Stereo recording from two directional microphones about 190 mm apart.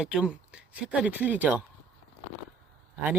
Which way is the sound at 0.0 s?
5° right (ahead or behind).